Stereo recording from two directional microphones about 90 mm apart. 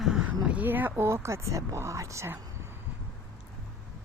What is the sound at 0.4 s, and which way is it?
Speech, 20° right (ahead or behind).